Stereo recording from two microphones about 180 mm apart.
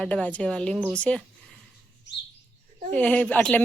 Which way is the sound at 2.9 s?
10° left (ahead or behind).